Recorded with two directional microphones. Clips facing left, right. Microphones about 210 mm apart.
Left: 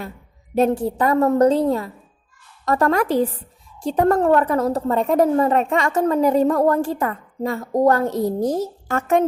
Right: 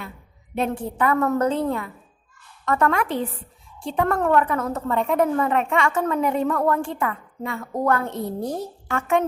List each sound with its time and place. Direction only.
0.5 s a woman's voice: 40° left (ahead or behind)